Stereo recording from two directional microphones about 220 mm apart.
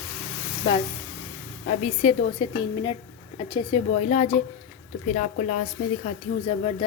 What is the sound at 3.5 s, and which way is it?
Stir, 30° left (ahead or behind).